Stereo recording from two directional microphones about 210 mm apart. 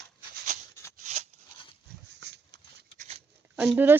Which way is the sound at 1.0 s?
35° right (ahead or behind).